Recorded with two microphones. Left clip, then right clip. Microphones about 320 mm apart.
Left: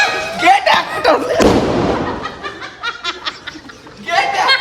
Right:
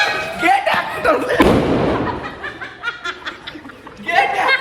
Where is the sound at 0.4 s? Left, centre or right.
Left.